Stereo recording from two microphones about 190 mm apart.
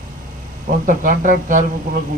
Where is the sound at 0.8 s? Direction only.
45° right (ahead or behind).